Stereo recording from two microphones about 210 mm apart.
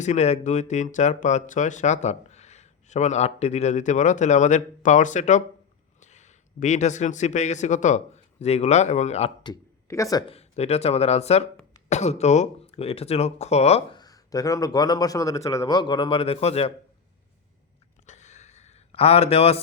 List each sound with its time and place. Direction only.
0.0 s speech: 30° left (ahead or behind)
10.3 s speech: 30° left (ahead or behind)
18.0 s a sound: 35° left (ahead or behind)